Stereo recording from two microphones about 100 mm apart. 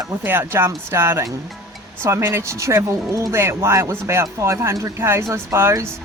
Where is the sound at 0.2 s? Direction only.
20° right (ahead or behind).